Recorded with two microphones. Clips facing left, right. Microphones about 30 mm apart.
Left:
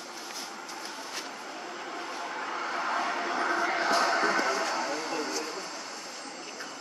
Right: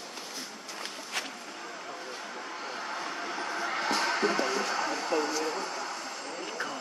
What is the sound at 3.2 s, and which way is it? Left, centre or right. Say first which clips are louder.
Vehicle: left 5 dB; left.